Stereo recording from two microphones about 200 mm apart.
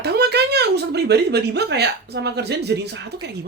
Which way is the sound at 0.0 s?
55° right (ahead or behind).